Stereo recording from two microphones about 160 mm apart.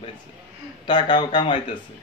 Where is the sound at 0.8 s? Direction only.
30° left (ahead or behind).